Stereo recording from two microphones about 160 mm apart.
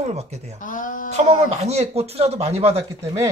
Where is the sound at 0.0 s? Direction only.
45° right (ahead or behind).